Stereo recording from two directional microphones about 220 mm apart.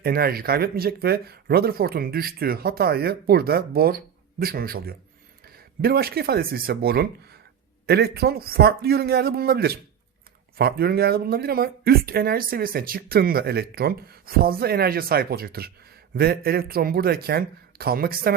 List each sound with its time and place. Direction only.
0.0 s speech: 45° right (ahead or behind)